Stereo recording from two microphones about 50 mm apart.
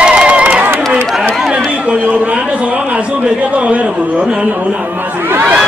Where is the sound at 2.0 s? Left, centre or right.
Right.